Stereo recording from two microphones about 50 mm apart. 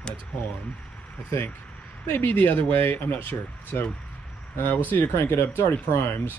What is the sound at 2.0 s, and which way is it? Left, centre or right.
Speech, left.